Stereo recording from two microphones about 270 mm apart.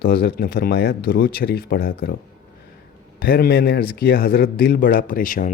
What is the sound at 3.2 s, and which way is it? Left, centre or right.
A man's voice, left.